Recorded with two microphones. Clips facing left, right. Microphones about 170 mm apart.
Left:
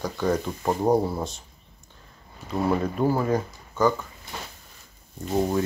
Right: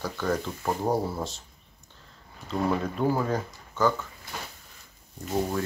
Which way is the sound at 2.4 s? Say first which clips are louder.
Left 3 dB; 10° left (ahead or behind).